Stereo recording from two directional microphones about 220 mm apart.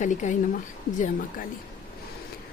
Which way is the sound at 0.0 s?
35° left (ahead or behind).